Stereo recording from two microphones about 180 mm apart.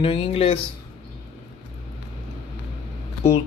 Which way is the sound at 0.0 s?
30° left (ahead or behind).